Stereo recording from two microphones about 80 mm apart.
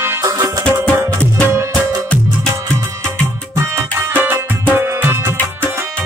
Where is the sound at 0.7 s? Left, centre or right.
Right.